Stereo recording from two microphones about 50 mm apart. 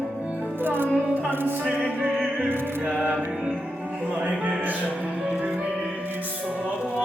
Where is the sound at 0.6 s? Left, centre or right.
Right.